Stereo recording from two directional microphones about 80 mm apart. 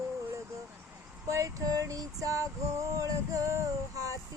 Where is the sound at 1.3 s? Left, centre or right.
Right.